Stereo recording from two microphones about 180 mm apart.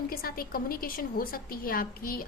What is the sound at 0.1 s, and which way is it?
A woman's voice, 55° left (ahead or behind).